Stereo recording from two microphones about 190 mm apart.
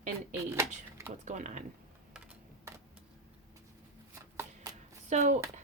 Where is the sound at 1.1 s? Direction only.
40° right (ahead or behind).